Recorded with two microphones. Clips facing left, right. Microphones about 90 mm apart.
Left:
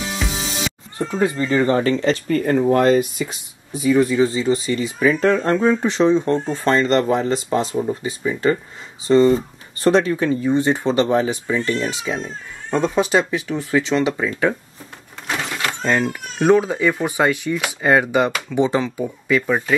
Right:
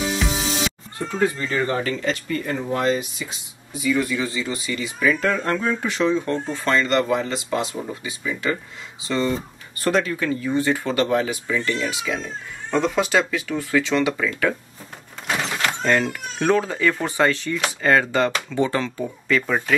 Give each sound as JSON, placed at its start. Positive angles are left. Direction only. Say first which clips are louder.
{"t": 0.2, "sound": "music", "louder": "right 1 dB", "side_deg": 0}
{"t": 1.5, "sound": "speech", "louder": "left 6 dB", "side_deg": 30}
{"t": 2.2, "sound": "speech", "louder": "left 9 dB", "side_deg": 50}
{"t": 15.2, "sound": "speech", "louder": "even", "side_deg": 5}